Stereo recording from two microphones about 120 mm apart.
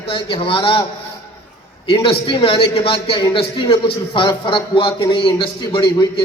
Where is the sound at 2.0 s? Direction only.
50° left (ahead or behind).